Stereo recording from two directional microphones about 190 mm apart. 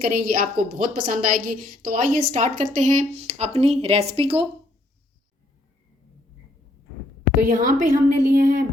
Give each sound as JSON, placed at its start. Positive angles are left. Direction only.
{"t": 0.0, "sound": "a woman's voice", "side_deg": -45}
{"t": 7.4, "sound": "a woman's voice", "side_deg": -45}